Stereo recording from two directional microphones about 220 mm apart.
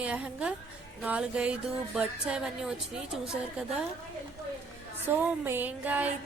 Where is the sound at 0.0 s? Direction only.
5° right (ahead or behind).